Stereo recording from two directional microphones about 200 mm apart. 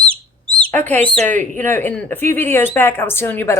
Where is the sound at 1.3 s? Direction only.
40° right (ahead or behind).